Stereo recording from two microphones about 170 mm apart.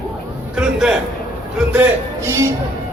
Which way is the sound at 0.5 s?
5° right (ahead or behind).